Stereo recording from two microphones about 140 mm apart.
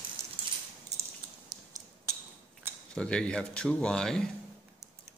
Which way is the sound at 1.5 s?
25° right (ahead or behind).